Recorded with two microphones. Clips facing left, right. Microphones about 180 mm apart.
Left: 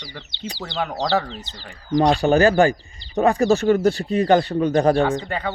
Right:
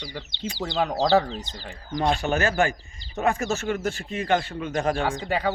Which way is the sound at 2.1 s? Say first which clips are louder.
Left 8 dB; 35° left (ahead or behind).